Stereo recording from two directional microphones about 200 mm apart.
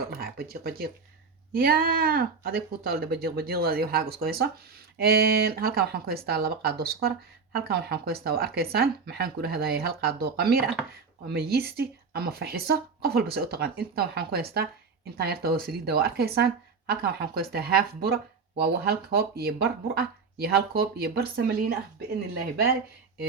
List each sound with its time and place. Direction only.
0.0 s speech: 50° right (ahead or behind)